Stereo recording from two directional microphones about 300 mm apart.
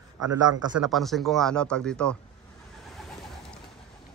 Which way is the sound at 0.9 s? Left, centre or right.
Centre.